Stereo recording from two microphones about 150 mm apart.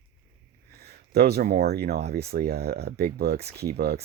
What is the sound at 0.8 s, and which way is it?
Speech, 90° right.